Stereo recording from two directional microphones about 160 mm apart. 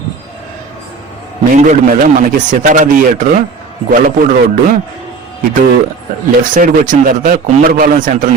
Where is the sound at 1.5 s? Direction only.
50° right (ahead or behind).